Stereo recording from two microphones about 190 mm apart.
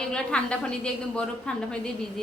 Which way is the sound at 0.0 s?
5° left (ahead or behind).